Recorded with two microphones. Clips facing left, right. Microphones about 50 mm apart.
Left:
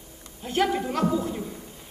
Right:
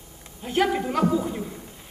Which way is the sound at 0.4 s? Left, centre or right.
Centre.